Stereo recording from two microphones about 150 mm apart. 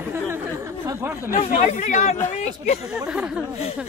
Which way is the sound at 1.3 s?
55° left (ahead or behind).